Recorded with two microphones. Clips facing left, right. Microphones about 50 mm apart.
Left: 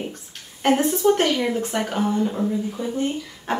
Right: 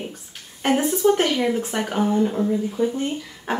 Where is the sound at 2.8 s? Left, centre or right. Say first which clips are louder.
Right 6 dB; right.